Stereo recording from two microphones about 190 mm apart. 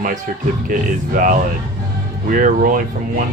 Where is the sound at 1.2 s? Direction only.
45° right (ahead or behind).